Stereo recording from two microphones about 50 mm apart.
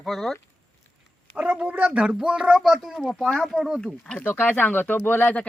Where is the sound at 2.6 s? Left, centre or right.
Centre.